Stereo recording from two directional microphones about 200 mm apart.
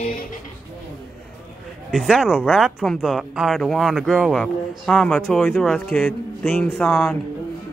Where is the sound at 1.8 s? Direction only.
Centre (ahead or behind).